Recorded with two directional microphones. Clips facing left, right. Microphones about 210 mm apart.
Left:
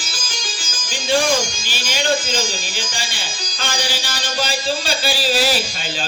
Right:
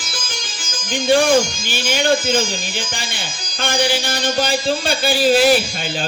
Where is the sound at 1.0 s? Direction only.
55° right (ahead or behind).